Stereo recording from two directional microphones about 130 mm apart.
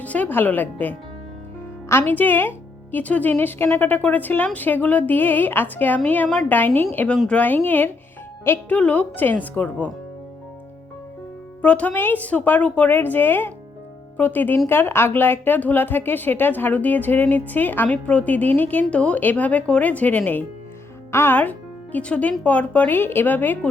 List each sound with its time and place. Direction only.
0.0 s a woman's voice: 10° left (ahead or behind)
6.6 s a woman's voice: 15° left (ahead or behind)
11.6 s a woman's voice: 10° left (ahead or behind)